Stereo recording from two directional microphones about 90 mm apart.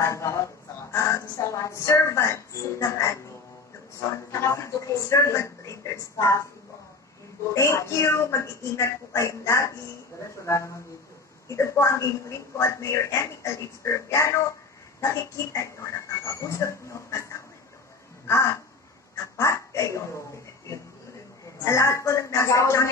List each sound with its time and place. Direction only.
0.0 s a woman's voice: 35° left (ahead or behind)
4.3 s a woman's voice: 35° left (ahead or behind)
7.5 s a woman's voice: 35° left (ahead or behind)
18.2 s a sound: 30° left (ahead or behind)
21.6 s a woman's voice: 35° left (ahead or behind)